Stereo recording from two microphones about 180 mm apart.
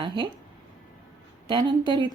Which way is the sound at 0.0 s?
25° right (ahead or behind).